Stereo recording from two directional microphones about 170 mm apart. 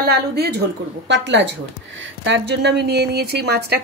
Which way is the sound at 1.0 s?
90° right.